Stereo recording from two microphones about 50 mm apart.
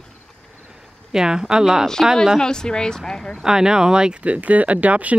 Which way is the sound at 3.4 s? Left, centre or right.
Centre.